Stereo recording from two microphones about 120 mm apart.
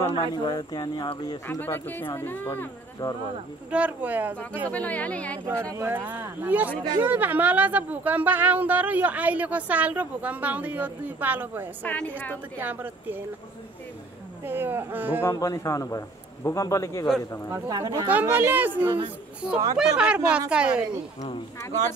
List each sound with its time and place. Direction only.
0.1 s speech: 40° left (ahead or behind)
1.6 s speech: 15° left (ahead or behind)
3.7 s speech: 10° right (ahead or behind)
4.6 s speech: 10° left (ahead or behind)
5.4 s speech: 25° right (ahead or behind)
11.8 s speech: 10° left (ahead or behind)
12.5 s speech: 15° right (ahead or behind)
14.4 s speech: 15° right (ahead or behind)
15.2 s a man's voice: 30° left (ahead or behind)
17.6 s speech: 30° right (ahead or behind)
18.0 s speech: 15° right (ahead or behind)